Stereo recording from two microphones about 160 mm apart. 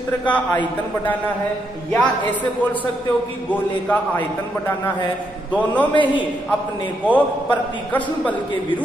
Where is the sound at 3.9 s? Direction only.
10° left (ahead or behind).